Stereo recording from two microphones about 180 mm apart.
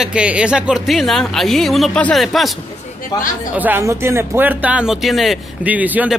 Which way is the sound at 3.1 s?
20° left (ahead or behind).